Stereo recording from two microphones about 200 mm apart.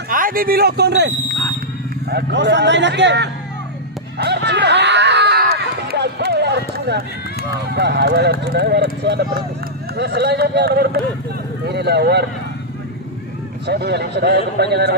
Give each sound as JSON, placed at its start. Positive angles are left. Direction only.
{"t": 0.1, "sound": "a man's voice", "side_deg": -45}
{"t": 4.2, "sound": "a sound", "side_deg": -55}
{"t": 7.7, "sound": "a man's voice", "side_deg": -55}
{"t": 13.7, "sound": "a man's voice", "side_deg": -55}